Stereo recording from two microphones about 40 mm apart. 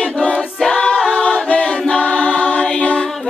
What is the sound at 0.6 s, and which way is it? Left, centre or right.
A capella, centre.